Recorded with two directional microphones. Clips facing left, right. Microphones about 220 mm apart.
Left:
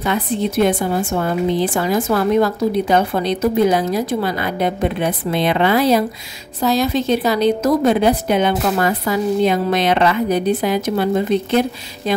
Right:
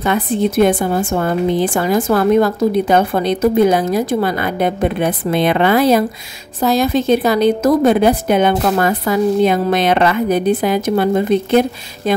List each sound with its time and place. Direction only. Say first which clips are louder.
0.0 s a woman's voice: right 3 dB; 50° right (ahead or behind)